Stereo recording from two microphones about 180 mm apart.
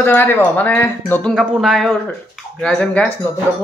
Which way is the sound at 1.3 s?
Centre (ahead or behind).